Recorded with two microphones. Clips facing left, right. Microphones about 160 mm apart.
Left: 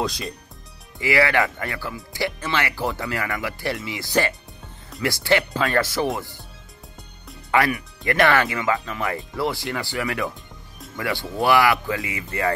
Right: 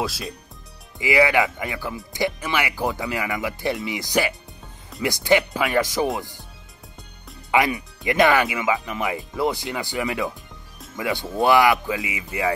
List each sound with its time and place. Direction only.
0.0 s speech: 5° right (ahead or behind)
0.9 s speech: 15° right (ahead or behind)
7.5 s speech: 20° right (ahead or behind)